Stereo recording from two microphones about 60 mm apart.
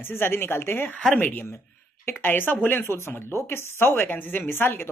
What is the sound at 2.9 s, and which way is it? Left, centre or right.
Speech, left.